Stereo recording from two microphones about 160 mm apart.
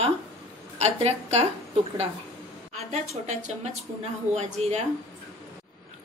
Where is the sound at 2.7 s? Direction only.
45° right (ahead or behind).